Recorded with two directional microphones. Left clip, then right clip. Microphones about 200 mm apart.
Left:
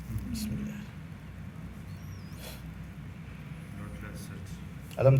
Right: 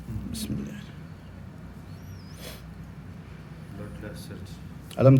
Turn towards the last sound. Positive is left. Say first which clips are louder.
# right 5 dB
turn(degrees=-50)  # may be behind; listen again after turning